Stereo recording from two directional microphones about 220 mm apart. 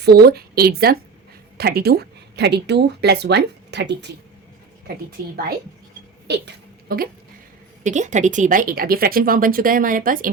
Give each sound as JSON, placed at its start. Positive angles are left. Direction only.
{"t": 0.0, "sound": "a woman's voice", "side_deg": -45}
{"t": 6.2, "sound": "a sound", "side_deg": -50}
{"t": 7.9, "sound": "speech", "side_deg": -35}